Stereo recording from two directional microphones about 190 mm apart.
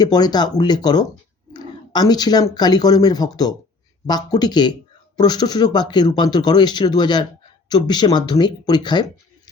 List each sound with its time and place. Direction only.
0.0 s speech: 20° left (ahead or behind)